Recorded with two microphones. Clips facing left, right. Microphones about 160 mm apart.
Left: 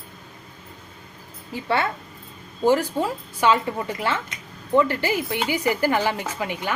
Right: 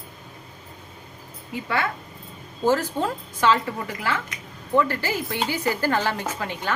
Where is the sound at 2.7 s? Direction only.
10° left (ahead or behind).